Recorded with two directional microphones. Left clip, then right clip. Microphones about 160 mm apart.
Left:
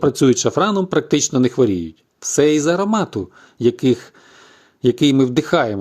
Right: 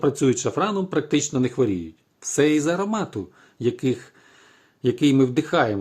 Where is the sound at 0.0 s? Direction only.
35° left (ahead or behind).